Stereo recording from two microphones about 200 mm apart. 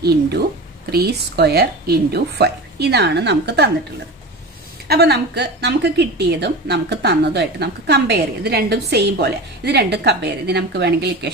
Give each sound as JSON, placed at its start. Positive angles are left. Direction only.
{"t": 0.9, "sound": "a woman's voice", "side_deg": -55}
{"t": 4.8, "sound": "a woman's voice", "side_deg": -55}